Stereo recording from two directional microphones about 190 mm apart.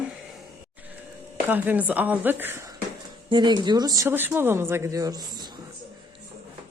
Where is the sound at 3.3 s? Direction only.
25° right (ahead or behind).